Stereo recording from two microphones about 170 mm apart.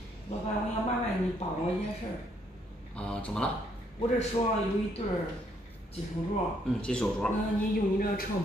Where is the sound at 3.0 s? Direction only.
5° left (ahead or behind).